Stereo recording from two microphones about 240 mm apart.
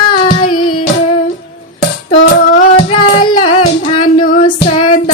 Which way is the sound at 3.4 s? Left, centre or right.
Left.